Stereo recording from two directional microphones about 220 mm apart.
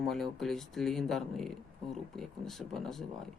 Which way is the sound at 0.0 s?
Centre (ahead or behind).